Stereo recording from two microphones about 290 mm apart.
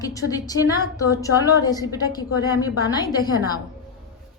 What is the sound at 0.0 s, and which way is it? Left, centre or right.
A woman's voice, centre.